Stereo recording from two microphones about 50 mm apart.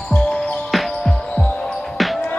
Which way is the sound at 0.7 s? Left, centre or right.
Centre.